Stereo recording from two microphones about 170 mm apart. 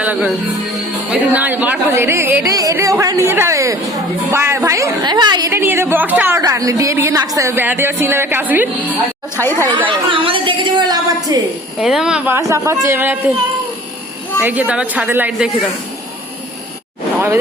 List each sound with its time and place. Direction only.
0.0 s a woman's voice: 10° right (ahead or behind); by 5.5 s 25° right (ahead or behind)
5.5 s speech: 15° right (ahead or behind)
9.9 s a woman's voice: 30° right (ahead or behind)
11.8 s speech: centre (ahead or behind)
14.4 s speech: 10° right (ahead or behind)